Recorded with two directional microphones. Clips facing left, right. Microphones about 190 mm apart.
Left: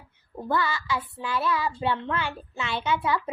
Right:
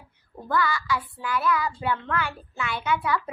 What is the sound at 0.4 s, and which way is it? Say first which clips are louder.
A child's voice: right 1 dB; 25° left (ahead or behind).